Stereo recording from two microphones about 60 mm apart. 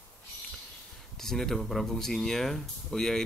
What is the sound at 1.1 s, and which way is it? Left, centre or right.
Speech, centre.